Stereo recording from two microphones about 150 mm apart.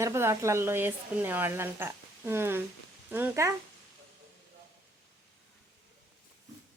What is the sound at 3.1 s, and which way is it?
Humming, 15° right (ahead or behind).